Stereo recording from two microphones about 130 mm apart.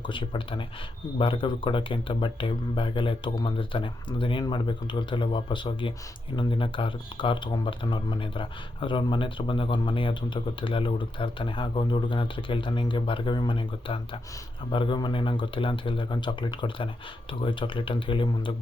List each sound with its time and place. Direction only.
0.0 s speech: 40° left (ahead or behind)